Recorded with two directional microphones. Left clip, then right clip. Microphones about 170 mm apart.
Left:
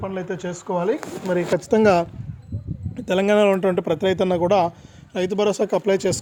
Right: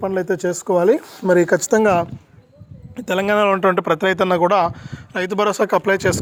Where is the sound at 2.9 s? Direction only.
5° right (ahead or behind); by 6.2 s 10° left (ahead or behind).